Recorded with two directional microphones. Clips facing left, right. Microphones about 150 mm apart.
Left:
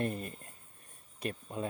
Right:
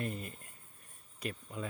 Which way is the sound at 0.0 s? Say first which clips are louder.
Left 4 dB; 35° left (ahead or behind).